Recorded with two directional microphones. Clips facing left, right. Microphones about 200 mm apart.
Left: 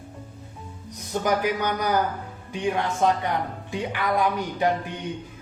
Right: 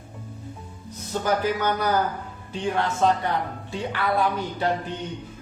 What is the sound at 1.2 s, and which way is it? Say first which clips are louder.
Speech: even; 15° left (ahead or behind).